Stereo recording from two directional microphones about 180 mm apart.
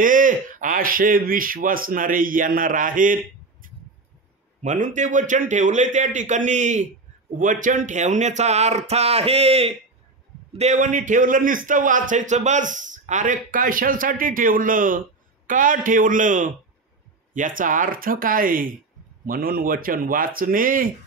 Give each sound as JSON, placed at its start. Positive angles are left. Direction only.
{"t": 0.0, "sound": "speech", "side_deg": -45}
{"t": 3.6, "sound": "a sound", "side_deg": -50}
{"t": 4.6, "sound": "a man's voice", "side_deg": -45}